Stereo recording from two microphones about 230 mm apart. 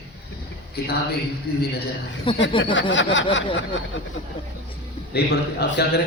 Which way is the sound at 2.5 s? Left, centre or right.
Left.